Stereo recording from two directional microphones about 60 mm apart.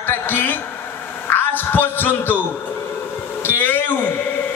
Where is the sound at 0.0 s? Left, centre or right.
Left.